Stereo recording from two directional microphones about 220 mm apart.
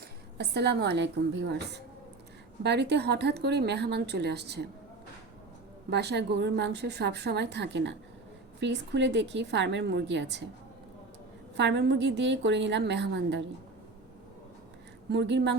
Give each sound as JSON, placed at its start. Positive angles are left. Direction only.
{"t": 0.3, "sound": "a woman's voice", "side_deg": -50}
{"t": 5.9, "sound": "a woman's voice", "side_deg": -50}
{"t": 11.5, "sound": "a woman's voice", "side_deg": -50}
{"t": 15.1, "sound": "a woman's voice", "side_deg": -50}